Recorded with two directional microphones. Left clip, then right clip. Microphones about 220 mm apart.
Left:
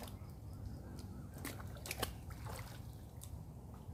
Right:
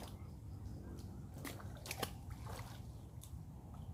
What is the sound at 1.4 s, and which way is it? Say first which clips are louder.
Trickle: left 1 dB; 20° left (ahead or behind).